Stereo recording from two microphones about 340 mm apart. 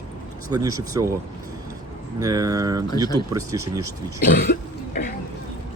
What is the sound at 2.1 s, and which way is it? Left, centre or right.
Speech, centre.